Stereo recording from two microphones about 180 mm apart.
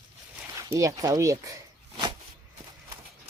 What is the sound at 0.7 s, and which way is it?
Speech, 20° right (ahead or behind).